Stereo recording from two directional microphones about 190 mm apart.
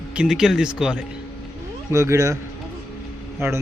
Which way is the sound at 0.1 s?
5° right (ahead or behind).